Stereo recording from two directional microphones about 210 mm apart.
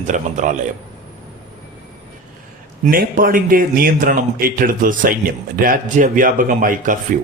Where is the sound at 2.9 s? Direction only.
45° right (ahead or behind).